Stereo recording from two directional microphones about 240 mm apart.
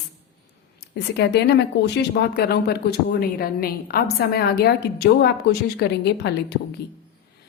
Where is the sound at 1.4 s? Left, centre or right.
Left.